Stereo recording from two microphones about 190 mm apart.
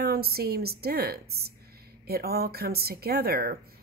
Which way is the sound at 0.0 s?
55° right (ahead or behind).